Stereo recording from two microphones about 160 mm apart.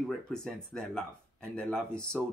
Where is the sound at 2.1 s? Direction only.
5° right (ahead or behind).